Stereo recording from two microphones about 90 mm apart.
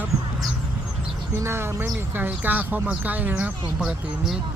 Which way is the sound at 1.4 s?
30° right (ahead or behind).